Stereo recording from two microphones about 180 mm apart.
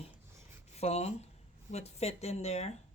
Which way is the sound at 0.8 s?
35° left (ahead or behind).